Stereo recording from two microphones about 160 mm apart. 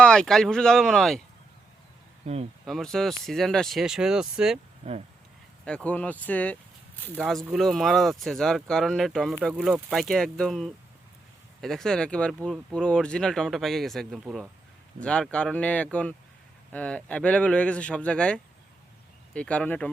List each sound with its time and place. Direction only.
0.0 s speech: 5° left (ahead or behind)
2.2 s speech: 40° right (ahead or behind)
2.6 s speech: centre (ahead or behind)
4.8 s speech: 35° right (ahead or behind)
5.6 s speech: 10° left (ahead or behind)